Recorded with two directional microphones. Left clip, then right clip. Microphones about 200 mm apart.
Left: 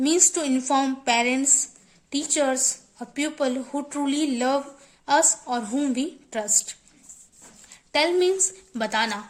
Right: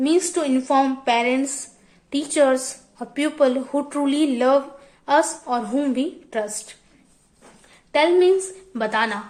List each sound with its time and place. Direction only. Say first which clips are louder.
0.0 s a woman's voice: right 2 dB; 35° left (ahead or behind)